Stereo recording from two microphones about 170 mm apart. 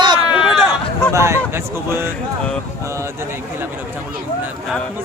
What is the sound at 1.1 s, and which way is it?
Speech, 15° right (ahead or behind).